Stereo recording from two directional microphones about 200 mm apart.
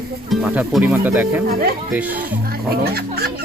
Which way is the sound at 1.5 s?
45° right (ahead or behind).